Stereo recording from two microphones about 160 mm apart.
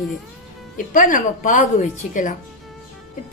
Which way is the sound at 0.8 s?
55° left (ahead or behind).